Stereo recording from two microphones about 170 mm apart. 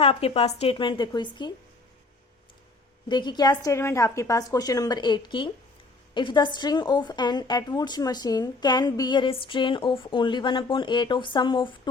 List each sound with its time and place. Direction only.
0.0 s a woman's voice: 35° left (ahead or behind)
3.1 s a woman's voice: 25° left (ahead or behind)